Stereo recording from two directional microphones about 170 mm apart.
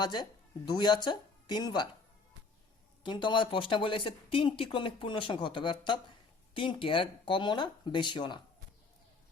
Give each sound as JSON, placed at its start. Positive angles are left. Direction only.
{"t": 0.0, "sound": "a woman's voice", "side_deg": 25}
{"t": 3.0, "sound": "speech", "side_deg": 30}